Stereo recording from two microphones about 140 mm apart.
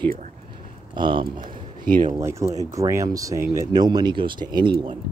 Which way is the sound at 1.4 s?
70° right (ahead or behind).